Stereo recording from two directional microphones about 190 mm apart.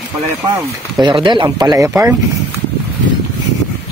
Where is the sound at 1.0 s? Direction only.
25° right (ahead or behind).